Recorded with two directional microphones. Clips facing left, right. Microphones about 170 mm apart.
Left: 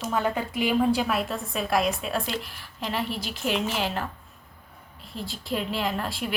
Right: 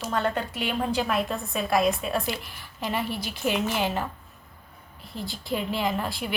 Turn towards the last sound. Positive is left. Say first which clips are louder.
# right 1 dB
turn(degrees=0)  # may be behind; listen again after turning